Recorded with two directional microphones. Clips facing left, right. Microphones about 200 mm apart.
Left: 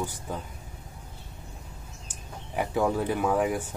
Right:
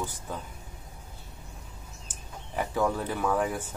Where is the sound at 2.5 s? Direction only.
15° left (ahead or behind).